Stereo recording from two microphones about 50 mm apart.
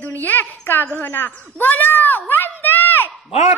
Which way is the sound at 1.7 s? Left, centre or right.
Left.